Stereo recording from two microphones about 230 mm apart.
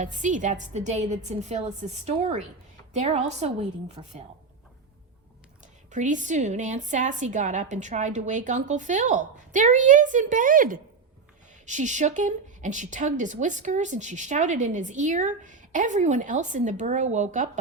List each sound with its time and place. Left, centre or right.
0.0 s a woman's voice: right
5.9 s a woman's voice: right